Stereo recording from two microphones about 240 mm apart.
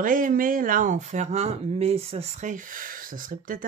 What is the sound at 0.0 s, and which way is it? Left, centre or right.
Speech, right.